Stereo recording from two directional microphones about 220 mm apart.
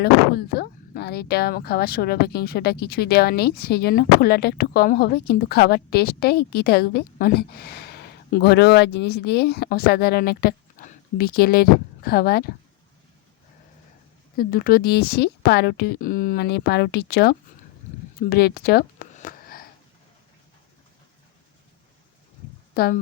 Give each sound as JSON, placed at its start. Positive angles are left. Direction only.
{"t": 0.0, "sound": "speech", "side_deg": 45}
{"t": 14.3, "sound": "speech", "side_deg": 40}
{"t": 18.3, "sound": "a sound", "side_deg": 45}
{"t": 22.7, "sound": "speech", "side_deg": 45}